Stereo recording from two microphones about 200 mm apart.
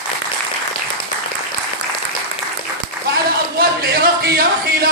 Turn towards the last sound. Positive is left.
turn(degrees=-50)  # may be behind; listen again after turning